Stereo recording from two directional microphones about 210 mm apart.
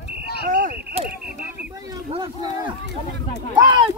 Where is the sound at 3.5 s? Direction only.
20° right (ahead or behind).